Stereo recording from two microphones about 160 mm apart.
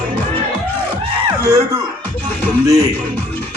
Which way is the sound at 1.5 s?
20° right (ahead or behind).